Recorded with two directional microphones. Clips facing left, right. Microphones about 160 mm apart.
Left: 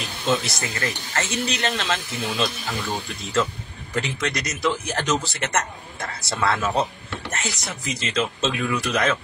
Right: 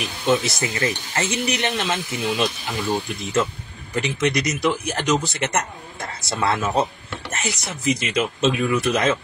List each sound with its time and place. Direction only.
0.3 s speech: 20° right (ahead or behind)